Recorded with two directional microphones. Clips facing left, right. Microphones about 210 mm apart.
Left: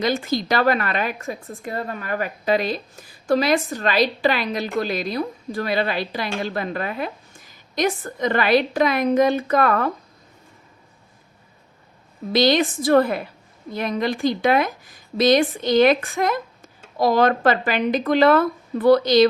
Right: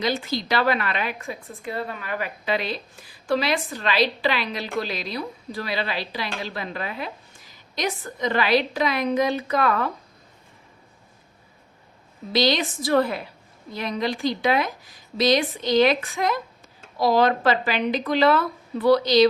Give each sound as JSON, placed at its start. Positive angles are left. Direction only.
{"t": 0.0, "sound": "a woman's voice", "side_deg": 50}
{"t": 12.3, "sound": "a woman's voice", "side_deg": 50}